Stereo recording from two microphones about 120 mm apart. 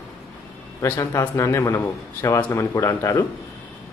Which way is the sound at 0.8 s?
20° left (ahead or behind).